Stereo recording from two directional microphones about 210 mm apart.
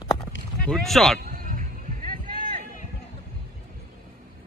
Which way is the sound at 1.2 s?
40° right (ahead or behind).